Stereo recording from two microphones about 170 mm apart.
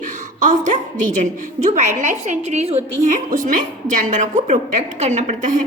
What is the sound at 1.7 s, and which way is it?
A woman's voice, 45° right (ahead or behind).